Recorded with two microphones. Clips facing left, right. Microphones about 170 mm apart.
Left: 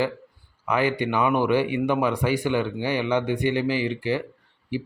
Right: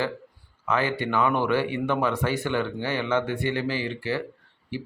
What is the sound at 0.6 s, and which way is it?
Speech, 15° left (ahead or behind).